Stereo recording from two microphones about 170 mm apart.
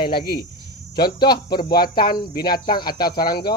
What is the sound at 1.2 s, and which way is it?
Speech, 25° left (ahead or behind).